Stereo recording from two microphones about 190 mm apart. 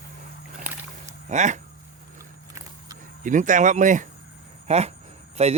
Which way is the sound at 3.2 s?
40° right (ahead or behind).